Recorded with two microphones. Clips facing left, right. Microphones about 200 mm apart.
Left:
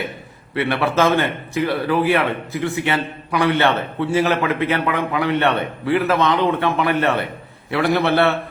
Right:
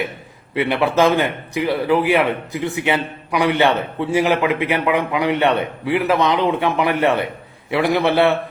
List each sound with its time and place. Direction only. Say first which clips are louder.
0.5 s a man's voice: right 2 dB; 15° right (ahead or behind)